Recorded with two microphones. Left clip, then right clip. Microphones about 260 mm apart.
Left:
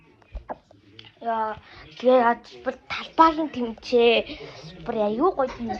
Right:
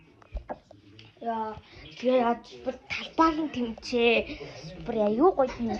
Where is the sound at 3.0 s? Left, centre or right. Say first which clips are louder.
Left 6 dB; centre.